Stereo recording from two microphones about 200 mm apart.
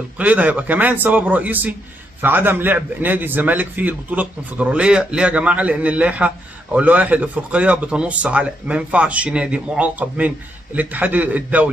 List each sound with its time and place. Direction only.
0.2 s a man's voice: 5° right (ahead or behind)